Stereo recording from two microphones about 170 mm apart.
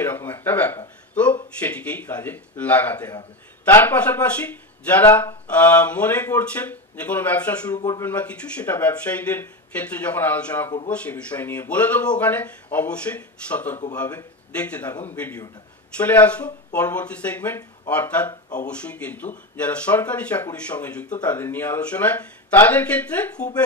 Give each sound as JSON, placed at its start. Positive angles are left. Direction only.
{"t": 0.0, "sound": "speech", "side_deg": 10}
{"t": 7.7, "sound": "speech", "side_deg": 20}
{"t": 8.1, "sound": "speech", "side_deg": 10}